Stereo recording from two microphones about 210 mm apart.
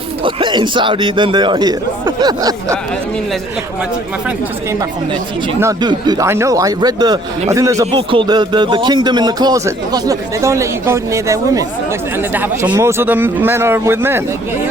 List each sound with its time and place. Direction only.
0.2 s a man's voice: 25° right (ahead or behind)
5.5 s speech: 15° right (ahead or behind)